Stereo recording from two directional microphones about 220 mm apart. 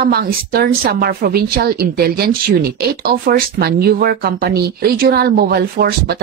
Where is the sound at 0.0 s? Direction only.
45° right (ahead or behind).